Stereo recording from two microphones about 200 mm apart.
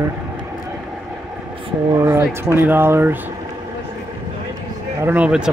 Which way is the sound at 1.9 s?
15° right (ahead or behind).